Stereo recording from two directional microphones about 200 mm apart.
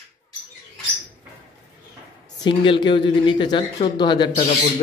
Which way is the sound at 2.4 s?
25° left (ahead or behind).